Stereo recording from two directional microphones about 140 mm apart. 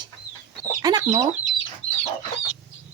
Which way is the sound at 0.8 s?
30° right (ahead or behind).